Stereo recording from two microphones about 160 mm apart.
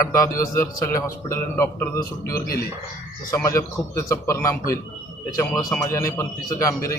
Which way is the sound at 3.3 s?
20° left (ahead or behind).